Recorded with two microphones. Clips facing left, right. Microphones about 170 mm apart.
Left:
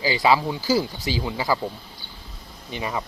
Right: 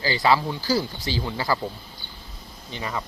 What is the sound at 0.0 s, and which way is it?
Speech, 15° left (ahead or behind).